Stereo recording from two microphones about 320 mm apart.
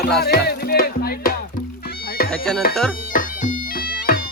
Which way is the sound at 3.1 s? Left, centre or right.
Left.